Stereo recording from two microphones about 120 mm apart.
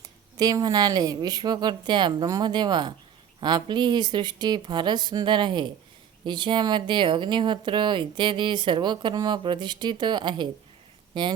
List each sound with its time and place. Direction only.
0.3 s speech: 30° right (ahead or behind)